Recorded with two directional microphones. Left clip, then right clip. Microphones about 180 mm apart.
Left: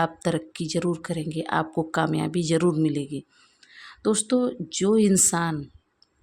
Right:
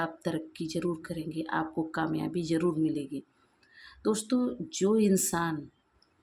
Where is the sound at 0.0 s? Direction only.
50° left (ahead or behind).